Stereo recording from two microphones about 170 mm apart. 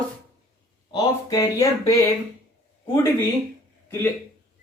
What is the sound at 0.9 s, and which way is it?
Speech, 25° left (ahead or behind).